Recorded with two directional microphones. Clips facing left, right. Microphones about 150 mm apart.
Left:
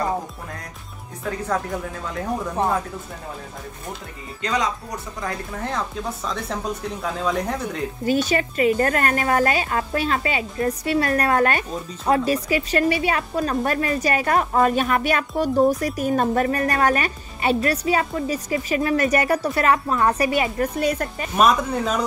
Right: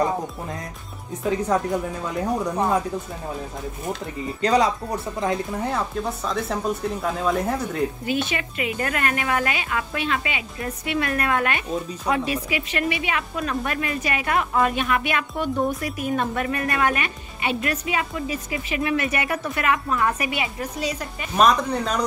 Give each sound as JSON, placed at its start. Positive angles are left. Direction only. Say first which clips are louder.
{"t": 1.2, "sound": "speech", "louder": "right 3 dB", "side_deg": -15}
{"t": 4.4, "sound": "speech", "louder": "right 5 dB", "side_deg": -35}
{"t": 5.2, "sound": "speech", "louder": "right 5 dB", "side_deg": -20}
{"t": 5.6, "sound": "speech", "louder": "right 2 dB", "side_deg": -5}
{"t": 8.0, "sound": "a woman's voice", "louder": "left 5 dB", "side_deg": 40}
{"t": 21.4, "sound": "speech", "louder": "even", "side_deg": 5}